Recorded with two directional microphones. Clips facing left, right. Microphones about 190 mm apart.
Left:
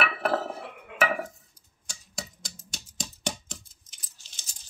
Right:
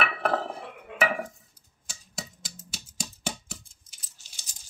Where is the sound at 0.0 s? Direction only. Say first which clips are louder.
Even; 5° left (ahead or behind).